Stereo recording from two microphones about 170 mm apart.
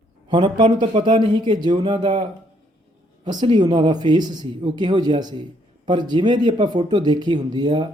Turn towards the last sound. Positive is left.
turn(degrees=-25)  # may be behind; listen again after turning